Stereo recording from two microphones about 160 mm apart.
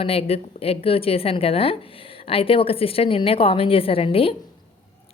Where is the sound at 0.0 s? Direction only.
40° left (ahead or behind).